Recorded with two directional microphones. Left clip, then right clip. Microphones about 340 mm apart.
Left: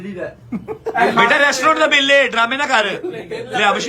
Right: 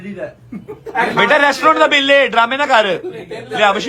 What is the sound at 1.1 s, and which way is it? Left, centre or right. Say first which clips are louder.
A man's voice: right 3 dB; centre.